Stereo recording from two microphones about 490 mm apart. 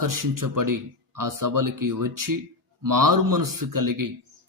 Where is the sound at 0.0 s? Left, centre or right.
Right.